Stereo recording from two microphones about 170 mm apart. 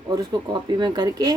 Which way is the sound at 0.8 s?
25° right (ahead or behind).